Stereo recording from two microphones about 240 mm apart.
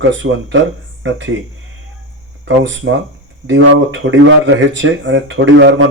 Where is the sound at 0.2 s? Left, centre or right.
Right.